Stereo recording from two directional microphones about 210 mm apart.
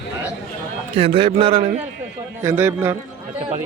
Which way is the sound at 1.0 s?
25° right (ahead or behind).